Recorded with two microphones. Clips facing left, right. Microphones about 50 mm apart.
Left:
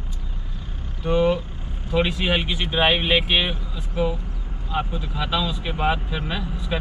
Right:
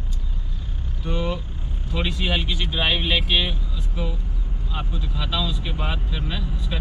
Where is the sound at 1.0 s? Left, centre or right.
Centre.